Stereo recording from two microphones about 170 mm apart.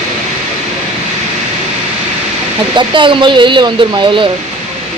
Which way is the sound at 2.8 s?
30° right (ahead or behind).